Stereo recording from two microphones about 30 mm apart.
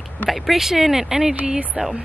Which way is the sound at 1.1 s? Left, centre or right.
Right.